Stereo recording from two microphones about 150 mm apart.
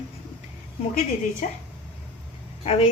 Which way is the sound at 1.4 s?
55° left (ahead or behind).